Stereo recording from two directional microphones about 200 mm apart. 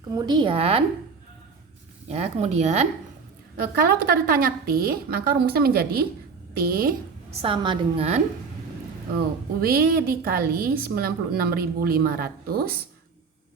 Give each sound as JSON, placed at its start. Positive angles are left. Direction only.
{"t": 0.1, "sound": "a woman's voice", "side_deg": -20}
{"t": 2.0, "sound": "speech", "side_deg": -35}
{"t": 4.0, "sound": "a woman's voice", "side_deg": -45}
{"t": 7.4, "sound": "a woman's voice", "side_deg": -25}
{"t": 9.6, "sound": "a woman's voice", "side_deg": -50}